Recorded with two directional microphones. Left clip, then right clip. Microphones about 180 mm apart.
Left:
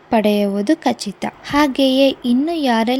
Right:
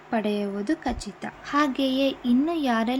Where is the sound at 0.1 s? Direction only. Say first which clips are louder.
Left 11 dB; 35° left (ahead or behind).